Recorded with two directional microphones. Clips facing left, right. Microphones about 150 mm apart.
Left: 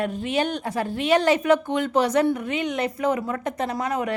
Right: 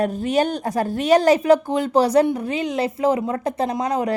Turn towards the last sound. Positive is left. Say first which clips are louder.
# right 4 dB
turn(degrees=-30)  # may be behind; listen again after turning